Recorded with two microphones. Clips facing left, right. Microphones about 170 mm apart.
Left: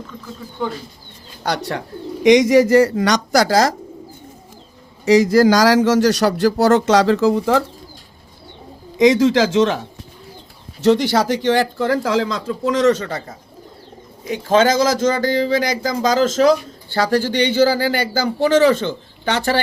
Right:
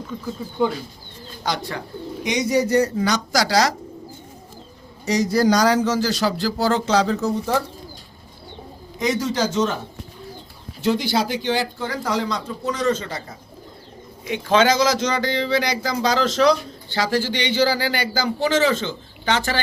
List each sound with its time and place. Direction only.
1.5 s speech: 70° left (ahead or behind)
2.2 s speech: 90° left; by 3.4 s 75° left (ahead or behind)
3.4 s speech: 50° left (ahead or behind)
5.0 s speech: 90° left
9.0 s speech: 90° left
10.8 s speech: 80° left; by 13.3 s 55° left (ahead or behind)
14.3 s speech: 40° left (ahead or behind); by 19.4 s 55° left (ahead or behind)